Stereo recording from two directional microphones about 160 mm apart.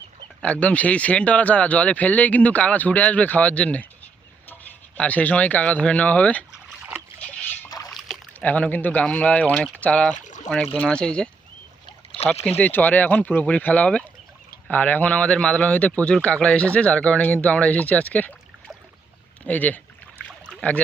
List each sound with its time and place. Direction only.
0.4 s speech: 10° left (ahead or behind)
4.9 s speech: 10° left (ahead or behind)
7.9 s rowboat: centre (ahead or behind)
8.3 s speech: 10° left (ahead or behind)
10.2 s a sound: 50° left (ahead or behind)
10.8 s speech: 5° left (ahead or behind)
12.5 s speech: 10° left (ahead or behind)
19.5 s speech: 10° left (ahead or behind)
20.2 s a sound: 5° left (ahead or behind)